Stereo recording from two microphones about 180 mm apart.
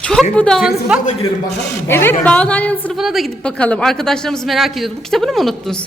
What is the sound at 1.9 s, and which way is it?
A man's voice, 10° left (ahead or behind).